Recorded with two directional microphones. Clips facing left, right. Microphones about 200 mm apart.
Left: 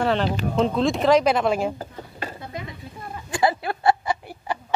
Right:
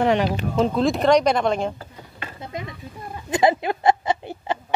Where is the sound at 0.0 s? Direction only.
15° right (ahead or behind).